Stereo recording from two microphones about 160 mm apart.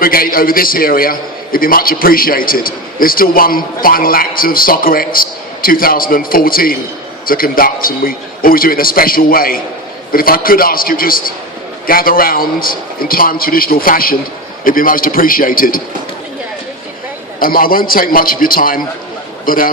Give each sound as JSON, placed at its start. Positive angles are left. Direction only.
{"t": 0.0, "sound": "a man's voice", "side_deg": 65}
{"t": 17.4, "sound": "a man's voice", "side_deg": 65}